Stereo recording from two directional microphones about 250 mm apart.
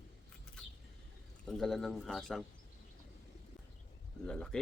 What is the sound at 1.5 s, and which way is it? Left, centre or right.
Speech, centre.